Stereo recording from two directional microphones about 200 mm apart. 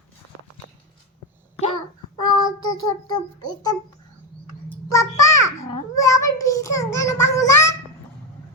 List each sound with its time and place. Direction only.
2.2 s child singing: 20° left (ahead or behind)
4.9 s a sound: 15° left (ahead or behind)
6.0 s child singing: 15° left (ahead or behind)